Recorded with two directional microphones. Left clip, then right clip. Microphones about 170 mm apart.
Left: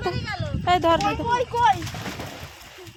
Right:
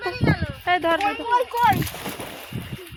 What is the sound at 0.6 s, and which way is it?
Speech, 25° left (ahead or behind).